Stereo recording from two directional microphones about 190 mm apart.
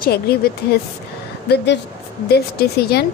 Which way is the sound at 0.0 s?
55° left (ahead or behind).